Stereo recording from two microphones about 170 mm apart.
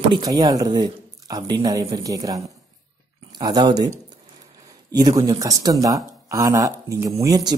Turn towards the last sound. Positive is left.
turn(degrees=-20)  # may be behind; listen again after turning